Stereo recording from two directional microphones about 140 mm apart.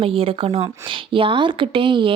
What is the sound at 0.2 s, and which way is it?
A woman's voice, 40° right (ahead or behind).